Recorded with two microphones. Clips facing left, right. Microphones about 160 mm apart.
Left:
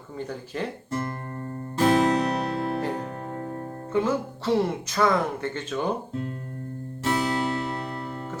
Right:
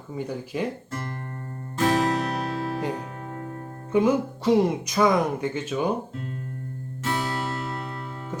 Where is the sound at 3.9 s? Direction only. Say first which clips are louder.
Right 4 dB; 15° right (ahead or behind).